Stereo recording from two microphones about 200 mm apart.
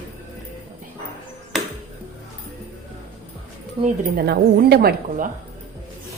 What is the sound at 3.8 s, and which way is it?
Speech, 50° right (ahead or behind).